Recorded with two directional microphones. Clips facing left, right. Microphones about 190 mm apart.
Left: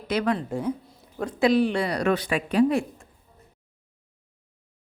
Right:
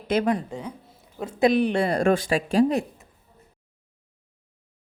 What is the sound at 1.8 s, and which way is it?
Speech, 50° right (ahead or behind).